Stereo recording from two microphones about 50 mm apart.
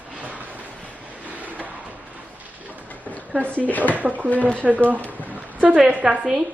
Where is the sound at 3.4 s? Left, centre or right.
Left.